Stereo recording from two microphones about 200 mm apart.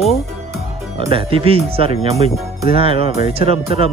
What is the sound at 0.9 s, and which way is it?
Speech, 30° right (ahead or behind).